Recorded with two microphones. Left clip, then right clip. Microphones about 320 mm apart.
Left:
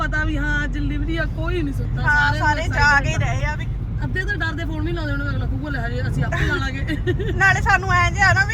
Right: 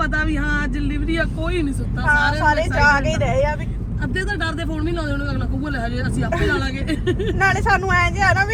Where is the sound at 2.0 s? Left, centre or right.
Centre.